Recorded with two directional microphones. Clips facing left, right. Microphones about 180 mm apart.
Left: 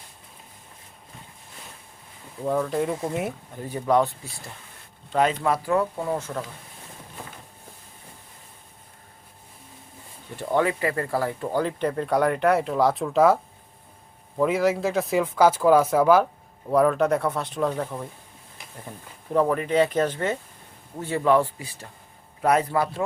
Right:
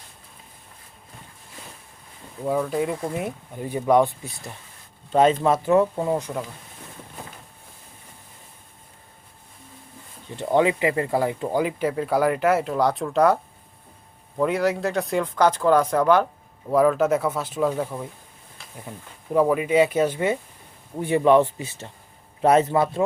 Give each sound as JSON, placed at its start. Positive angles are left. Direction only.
{"t": 2.4, "sound": "speech", "side_deg": -5}
{"t": 3.5, "sound": "speech", "side_deg": -15}
{"t": 10.3, "sound": "speech", "side_deg": -20}